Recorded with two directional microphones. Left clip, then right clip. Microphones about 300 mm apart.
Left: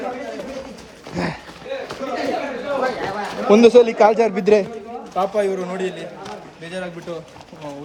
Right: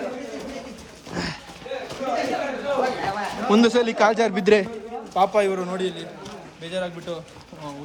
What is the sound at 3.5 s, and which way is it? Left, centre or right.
A man's voice, centre.